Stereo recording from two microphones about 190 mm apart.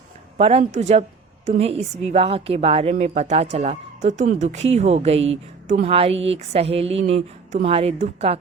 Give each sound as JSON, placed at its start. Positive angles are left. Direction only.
{"t": 0.3, "sound": "a woman's voice", "side_deg": -35}